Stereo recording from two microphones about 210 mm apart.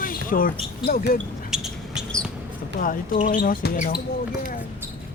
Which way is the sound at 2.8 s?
40° left (ahead or behind).